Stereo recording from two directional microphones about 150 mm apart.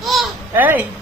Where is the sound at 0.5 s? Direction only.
10° right (ahead or behind).